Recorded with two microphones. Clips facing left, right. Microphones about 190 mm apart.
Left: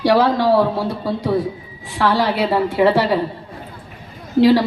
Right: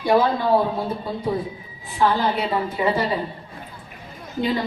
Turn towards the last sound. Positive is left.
turn(degrees=80)